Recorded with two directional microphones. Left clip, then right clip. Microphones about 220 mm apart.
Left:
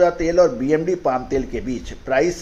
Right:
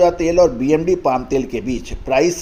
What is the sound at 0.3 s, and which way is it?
Speech, 25° right (ahead or behind).